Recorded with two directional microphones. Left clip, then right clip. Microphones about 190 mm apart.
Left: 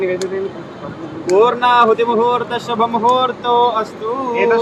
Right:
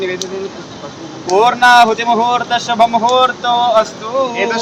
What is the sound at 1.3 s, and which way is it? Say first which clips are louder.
Speech: right 3 dB; 35° right (ahead or behind).